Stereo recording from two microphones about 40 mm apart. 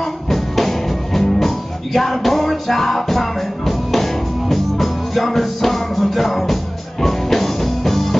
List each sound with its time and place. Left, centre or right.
0.0 s music: centre